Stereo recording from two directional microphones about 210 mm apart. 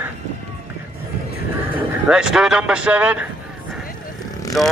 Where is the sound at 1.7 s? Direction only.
5° right (ahead or behind).